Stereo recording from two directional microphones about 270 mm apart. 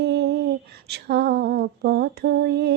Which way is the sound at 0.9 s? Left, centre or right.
Right.